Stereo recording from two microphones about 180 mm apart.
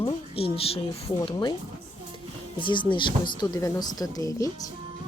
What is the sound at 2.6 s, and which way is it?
Speech, 25° left (ahead or behind).